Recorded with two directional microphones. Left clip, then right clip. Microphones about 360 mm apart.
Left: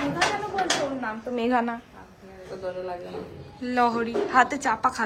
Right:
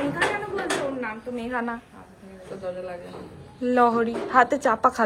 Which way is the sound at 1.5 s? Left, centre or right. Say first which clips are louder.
Left 3 dB; centre.